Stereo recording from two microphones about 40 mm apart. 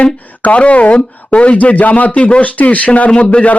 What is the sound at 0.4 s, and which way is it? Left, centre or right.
Speech, left.